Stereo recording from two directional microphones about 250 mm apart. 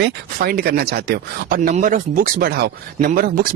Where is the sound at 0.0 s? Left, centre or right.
Right.